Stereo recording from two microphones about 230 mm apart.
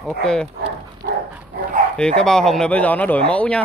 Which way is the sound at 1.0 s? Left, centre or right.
Right.